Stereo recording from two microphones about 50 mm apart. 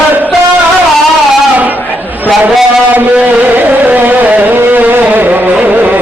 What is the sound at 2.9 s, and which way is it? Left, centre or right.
Music, right.